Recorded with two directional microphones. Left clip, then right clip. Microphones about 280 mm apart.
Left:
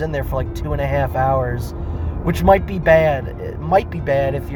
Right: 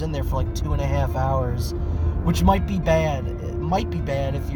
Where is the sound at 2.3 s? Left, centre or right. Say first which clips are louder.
Left 8 dB; left.